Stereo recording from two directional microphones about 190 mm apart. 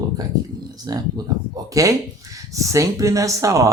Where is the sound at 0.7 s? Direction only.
20° right (ahead or behind).